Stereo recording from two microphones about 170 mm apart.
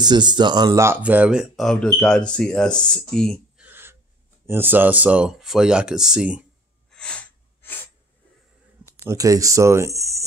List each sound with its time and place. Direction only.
0.0 s speech: 25° right (ahead or behind); by 3.6 s 5° left (ahead or behind)
3.6 s gasp: 10° right (ahead or behind)
4.5 s speech: 10° right (ahead or behind)
6.9 s a sound: 5° left (ahead or behind)
9.0 s speech: 20° right (ahead or behind)